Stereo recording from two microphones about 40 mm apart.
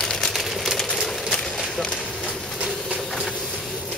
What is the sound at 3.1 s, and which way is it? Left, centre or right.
Vehicle, centre.